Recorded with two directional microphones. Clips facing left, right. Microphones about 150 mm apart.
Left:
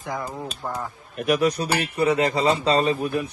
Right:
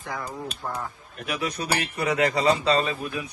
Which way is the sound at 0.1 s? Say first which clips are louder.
Left 3 dB; 20° left (ahead or behind).